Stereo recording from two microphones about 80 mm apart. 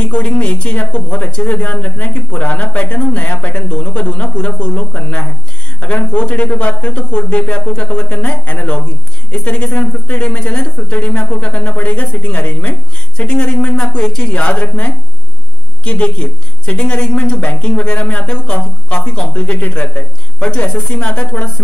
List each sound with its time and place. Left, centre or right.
0.0 s a man's voice: centre